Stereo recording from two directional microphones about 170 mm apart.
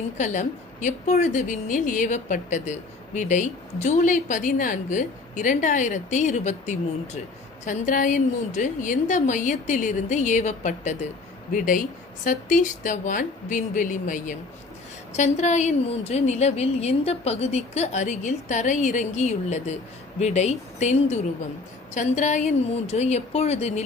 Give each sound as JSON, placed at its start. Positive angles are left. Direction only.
{"t": 0.2, "sound": "a woman's voice", "side_deg": 45}